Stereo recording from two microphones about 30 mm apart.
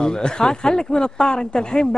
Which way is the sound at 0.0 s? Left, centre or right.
Left.